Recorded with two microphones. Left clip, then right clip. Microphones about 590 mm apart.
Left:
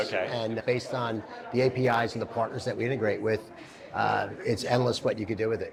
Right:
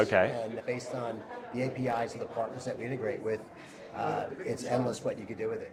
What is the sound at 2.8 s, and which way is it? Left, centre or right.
Speech, left.